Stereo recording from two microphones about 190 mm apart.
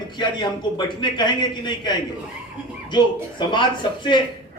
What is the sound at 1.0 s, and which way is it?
Speech, 25° left (ahead or behind).